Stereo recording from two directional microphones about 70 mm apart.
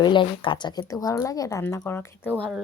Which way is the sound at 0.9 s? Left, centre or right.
Left.